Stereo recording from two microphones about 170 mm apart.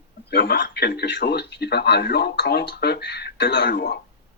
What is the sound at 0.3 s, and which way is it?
Speech, 75° left (ahead or behind).